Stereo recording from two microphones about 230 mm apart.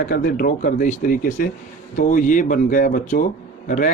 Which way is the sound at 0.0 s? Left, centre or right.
Left.